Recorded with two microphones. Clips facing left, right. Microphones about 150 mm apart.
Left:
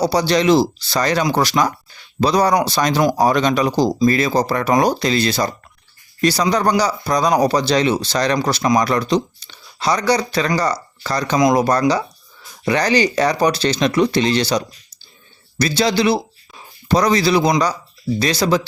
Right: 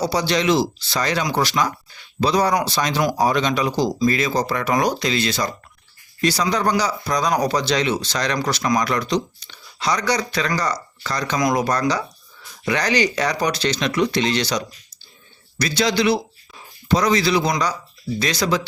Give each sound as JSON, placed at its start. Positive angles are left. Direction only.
{"t": 0.0, "sound": "speech", "side_deg": 35}